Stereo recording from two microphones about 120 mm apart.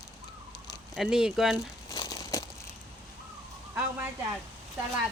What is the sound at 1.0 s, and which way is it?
Speech, 5° right (ahead or behind).